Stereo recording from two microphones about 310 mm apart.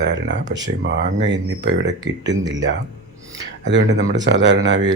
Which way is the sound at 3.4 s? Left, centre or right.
Right.